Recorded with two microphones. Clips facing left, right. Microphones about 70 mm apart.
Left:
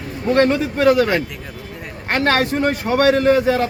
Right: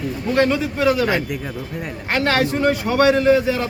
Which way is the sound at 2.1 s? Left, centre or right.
Left.